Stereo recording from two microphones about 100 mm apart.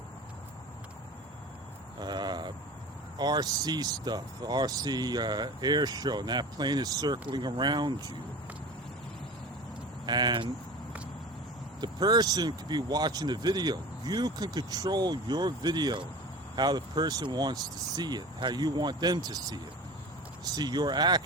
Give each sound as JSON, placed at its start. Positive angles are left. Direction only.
{"t": 2.0, "sound": "a sound", "side_deg": -45}
{"t": 3.2, "sound": "speech", "side_deg": -45}
{"t": 10.1, "sound": "speech", "side_deg": -45}
{"t": 11.8, "sound": "speech", "side_deg": -45}